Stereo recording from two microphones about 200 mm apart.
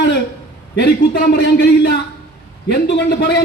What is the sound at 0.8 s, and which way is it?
Speech, 55° left (ahead or behind).